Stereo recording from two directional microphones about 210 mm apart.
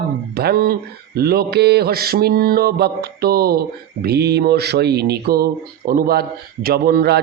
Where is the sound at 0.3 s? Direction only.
45° right (ahead or behind).